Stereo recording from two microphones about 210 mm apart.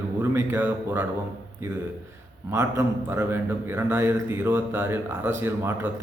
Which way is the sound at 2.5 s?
10° right (ahead or behind).